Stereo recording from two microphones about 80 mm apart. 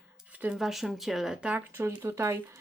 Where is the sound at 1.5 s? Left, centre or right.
Right.